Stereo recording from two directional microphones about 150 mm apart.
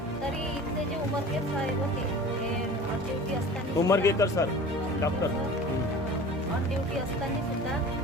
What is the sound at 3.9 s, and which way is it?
Speech, 20° left (ahead or behind).